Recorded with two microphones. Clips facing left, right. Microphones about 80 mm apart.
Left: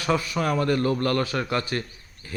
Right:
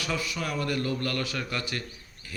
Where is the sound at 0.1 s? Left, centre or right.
Left.